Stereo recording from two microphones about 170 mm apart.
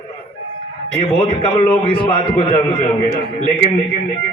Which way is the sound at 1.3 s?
30° left (ahead or behind).